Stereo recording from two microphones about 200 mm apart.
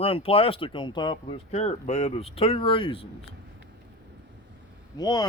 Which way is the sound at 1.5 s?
35° left (ahead or behind).